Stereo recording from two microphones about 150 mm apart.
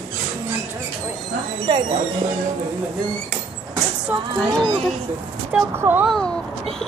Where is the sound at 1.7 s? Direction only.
30° right (ahead or behind).